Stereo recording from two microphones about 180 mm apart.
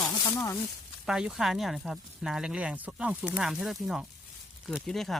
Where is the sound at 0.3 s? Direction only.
15° left (ahead or behind).